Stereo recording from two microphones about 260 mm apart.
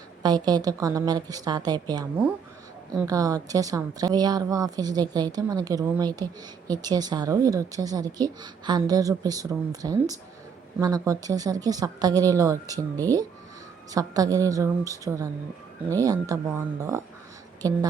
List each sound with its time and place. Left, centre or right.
0.2 s speech: centre
13.9 s speech: centre
17.6 s speech: centre